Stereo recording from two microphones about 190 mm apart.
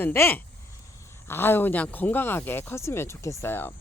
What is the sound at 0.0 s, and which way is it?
Speech, 10° left (ahead or behind).